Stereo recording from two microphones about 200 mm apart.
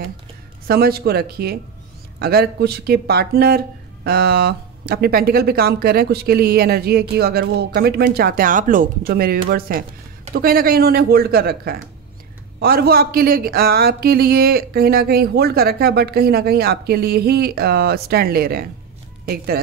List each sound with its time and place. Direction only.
0.7 s speech: 50° right (ahead or behind)